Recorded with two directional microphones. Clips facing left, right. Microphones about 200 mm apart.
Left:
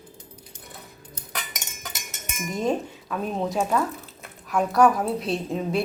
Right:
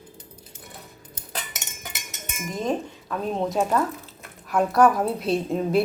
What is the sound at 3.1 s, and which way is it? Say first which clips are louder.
A woman's voice: right 1 dB; centre (ahead or behind).